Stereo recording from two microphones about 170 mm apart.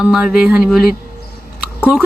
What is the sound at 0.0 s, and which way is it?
Speech, 5° right (ahead or behind).